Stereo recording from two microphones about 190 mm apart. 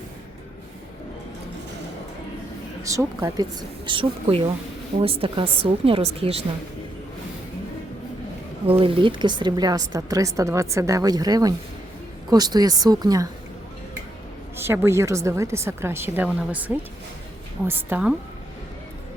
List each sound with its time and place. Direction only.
2.8 s a woman's voice: 15° right (ahead or behind); by 6.4 s 30° right (ahead or behind)
8.8 s a woman's voice: 25° right (ahead or behind)
14.5 s a woman's voice: 10° right (ahead or behind)